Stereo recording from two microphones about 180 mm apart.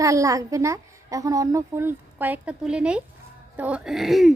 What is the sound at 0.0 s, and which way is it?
Speech, 15° right (ahead or behind).